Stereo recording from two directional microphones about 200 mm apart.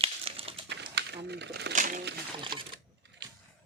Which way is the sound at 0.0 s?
30° right (ahead or behind).